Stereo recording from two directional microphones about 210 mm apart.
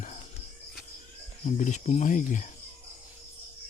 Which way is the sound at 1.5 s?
35° left (ahead or behind).